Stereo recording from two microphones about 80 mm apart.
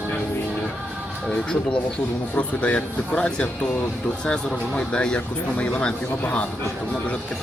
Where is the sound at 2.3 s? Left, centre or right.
Centre.